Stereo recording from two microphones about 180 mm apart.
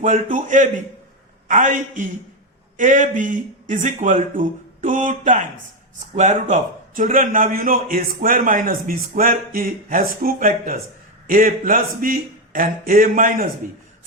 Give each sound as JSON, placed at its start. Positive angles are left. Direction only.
{"t": 0.0, "sound": "a man's voice", "side_deg": -45}